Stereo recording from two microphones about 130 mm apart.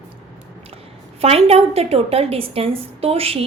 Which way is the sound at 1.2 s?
50° right (ahead or behind).